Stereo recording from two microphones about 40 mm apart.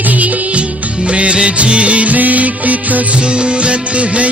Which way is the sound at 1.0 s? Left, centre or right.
Right.